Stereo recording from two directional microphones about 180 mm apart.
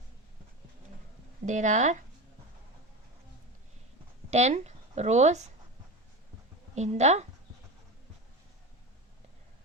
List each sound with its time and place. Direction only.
1.5 s speech: 40° right (ahead or behind)
4.3 s speech: 40° right (ahead or behind)
6.7 s speech: 40° right (ahead or behind)